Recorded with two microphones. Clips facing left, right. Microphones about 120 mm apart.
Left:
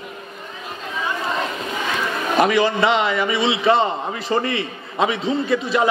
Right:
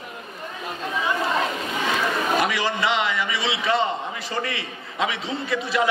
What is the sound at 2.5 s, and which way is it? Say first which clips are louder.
A man's voice: left 6 dB; 30° left (ahead or behind).